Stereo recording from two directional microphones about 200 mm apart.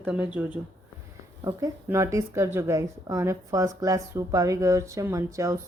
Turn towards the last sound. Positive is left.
turn(degrees=-15)  # may be behind; listen again after turning